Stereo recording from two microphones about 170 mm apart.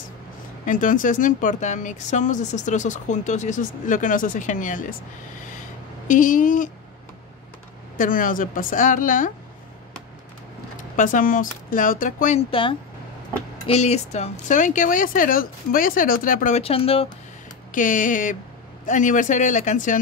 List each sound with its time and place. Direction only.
0.7 s speech: 50° left (ahead or behind)
6.0 s speech: 50° left (ahead or behind)
8.0 s speech: 55° left (ahead or behind)
11.0 s speech: 50° left (ahead or behind)
12.4 s speech: 30° left (ahead or behind); by 16.6 s 50° left (ahead or behind)
16.6 s speech: 35° left (ahead or behind)
17.6 s speech: 50° left (ahead or behind)